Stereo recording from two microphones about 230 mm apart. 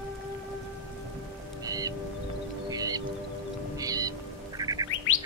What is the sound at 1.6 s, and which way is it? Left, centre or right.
Music, centre.